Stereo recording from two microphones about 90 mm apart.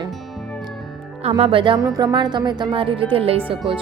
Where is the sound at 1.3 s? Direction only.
90° right; by 1.8 s 75° right (ahead or behind).